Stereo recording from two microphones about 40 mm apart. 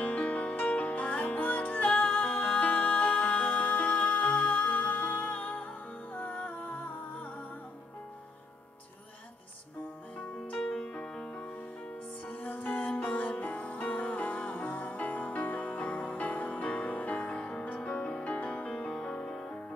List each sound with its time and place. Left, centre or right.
0.0 s music: left
0.7 s music: left
1.9 s music: left
10.6 s music: centre
12.3 s music: left
17.3 s music: left